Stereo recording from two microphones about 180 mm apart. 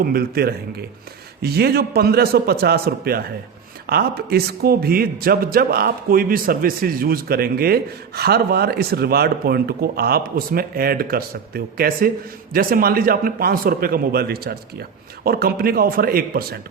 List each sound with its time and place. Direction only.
0.0 s a man's voice: 55° right (ahead or behind)